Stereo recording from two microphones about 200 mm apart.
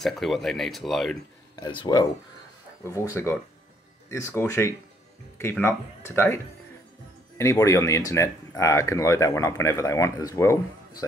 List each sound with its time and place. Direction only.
0.0 s speech: centre (ahead or behind)
1.6 s speech: 20° left (ahead or behind)
4.3 s speech: 10° left (ahead or behind)